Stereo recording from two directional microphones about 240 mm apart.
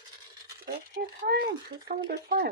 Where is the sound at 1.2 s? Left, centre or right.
Right.